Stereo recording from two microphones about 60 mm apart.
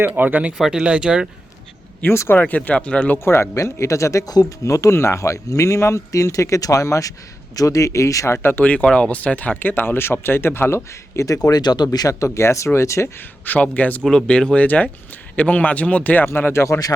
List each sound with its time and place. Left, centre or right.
0.0 s speech: right
0.6 s speech: centre
2.1 s speech: left
2.4 s a man's voice: left
3.2 s speech: left
3.5 s speech: left
8.4 s speech: left
8.6 s speech: left
11.4 s speech: left
13.1 s a man's voice: left
14.0 s a man's voice: centre
16.2 s speech: left